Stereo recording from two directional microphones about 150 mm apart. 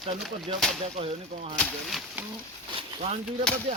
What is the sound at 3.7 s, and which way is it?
Whip, 45° right (ahead or behind).